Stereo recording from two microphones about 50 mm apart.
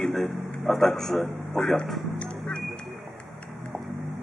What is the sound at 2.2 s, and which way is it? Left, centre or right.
Music, centre.